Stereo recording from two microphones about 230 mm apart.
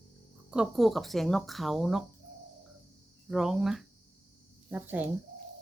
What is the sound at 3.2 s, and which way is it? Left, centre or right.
Speech, centre.